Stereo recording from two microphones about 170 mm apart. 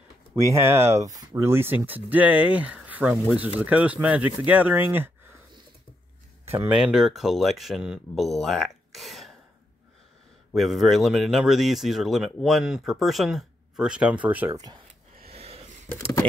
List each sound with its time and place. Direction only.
0.4 s speech: 15° right (ahead or behind)
6.7 s speech: 5° right (ahead or behind)
10.5 s speech: centre (ahead or behind)
14.5 s speech: 25° right (ahead or behind)
15.3 s a sound: 35° right (ahead or behind)